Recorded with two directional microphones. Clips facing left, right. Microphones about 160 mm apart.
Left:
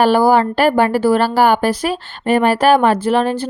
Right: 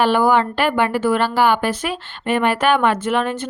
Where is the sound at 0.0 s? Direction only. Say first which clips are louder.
Left 4 dB; 35° left (ahead or behind).